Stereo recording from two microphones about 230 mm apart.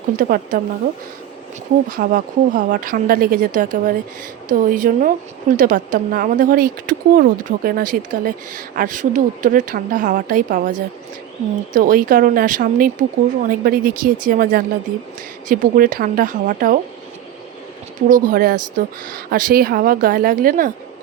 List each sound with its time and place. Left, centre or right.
0.2 s a woman's voice: right
1.9 s a woman's voice: right
18.1 s a woman's voice: right